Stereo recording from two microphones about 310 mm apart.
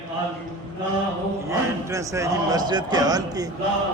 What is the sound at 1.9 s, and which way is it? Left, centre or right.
A man's voice, centre.